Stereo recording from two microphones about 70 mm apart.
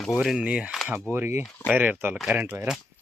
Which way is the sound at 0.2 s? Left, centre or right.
Centre.